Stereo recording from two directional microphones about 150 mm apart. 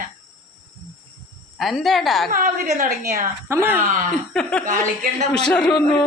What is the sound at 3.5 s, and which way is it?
Speech, 15° right (ahead or behind).